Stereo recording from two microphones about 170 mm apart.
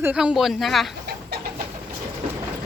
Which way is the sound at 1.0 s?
70° right (ahead or behind).